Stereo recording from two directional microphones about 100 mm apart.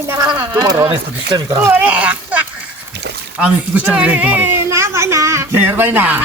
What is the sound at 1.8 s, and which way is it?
Speech, 15° right (ahead or behind).